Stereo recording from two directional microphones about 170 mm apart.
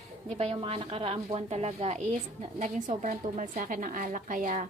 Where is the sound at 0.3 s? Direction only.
35° right (ahead or behind).